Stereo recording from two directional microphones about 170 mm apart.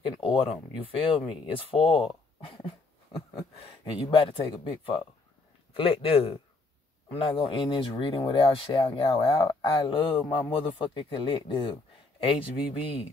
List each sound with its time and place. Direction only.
0.3 s speech: 35° left (ahead or behind)
2.0 s a sound: 30° left (ahead or behind)
3.3 s a man's voice: 35° left (ahead or behind)